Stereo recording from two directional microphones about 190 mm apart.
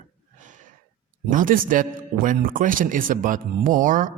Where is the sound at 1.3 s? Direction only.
45° right (ahead or behind).